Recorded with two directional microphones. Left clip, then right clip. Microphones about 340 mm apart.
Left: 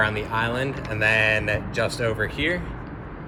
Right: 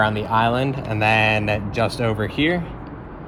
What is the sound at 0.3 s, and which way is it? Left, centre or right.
Speech, centre.